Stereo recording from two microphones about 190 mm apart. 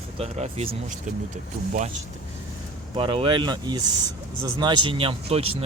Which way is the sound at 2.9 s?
25° right (ahead or behind).